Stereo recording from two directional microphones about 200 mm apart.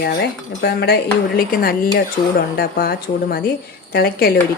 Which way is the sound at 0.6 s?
55° left (ahead or behind).